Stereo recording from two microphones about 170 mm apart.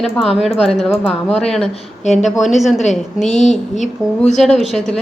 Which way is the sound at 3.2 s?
40° left (ahead or behind).